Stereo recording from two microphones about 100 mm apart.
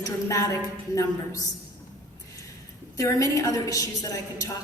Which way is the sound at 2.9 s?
35° left (ahead or behind).